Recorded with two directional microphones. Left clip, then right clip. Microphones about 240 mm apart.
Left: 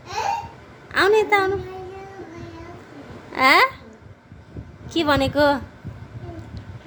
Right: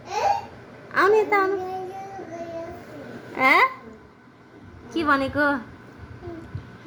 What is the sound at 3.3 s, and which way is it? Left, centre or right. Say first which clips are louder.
Speech: left 2 dB; centre.